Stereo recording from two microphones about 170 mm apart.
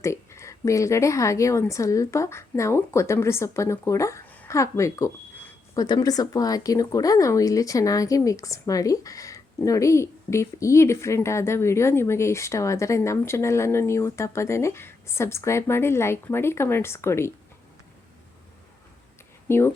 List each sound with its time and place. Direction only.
0.0 s speech: 15° left (ahead or behind)
19.5 s speech: 15° left (ahead or behind)